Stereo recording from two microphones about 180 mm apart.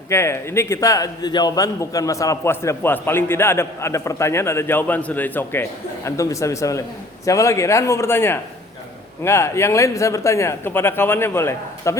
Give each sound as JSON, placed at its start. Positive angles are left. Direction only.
{"t": 0.1, "sound": "a man's voice", "side_deg": 15}